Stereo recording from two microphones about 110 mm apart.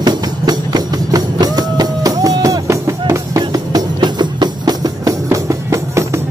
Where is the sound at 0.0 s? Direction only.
40° right (ahead or behind).